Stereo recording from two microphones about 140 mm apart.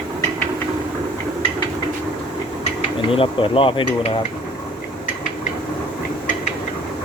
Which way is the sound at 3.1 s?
40° left (ahead or behind).